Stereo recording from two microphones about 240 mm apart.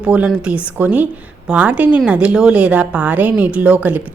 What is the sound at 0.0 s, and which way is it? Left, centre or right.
A woman's voice, centre.